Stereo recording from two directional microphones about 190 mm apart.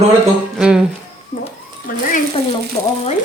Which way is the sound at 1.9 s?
45° left (ahead or behind).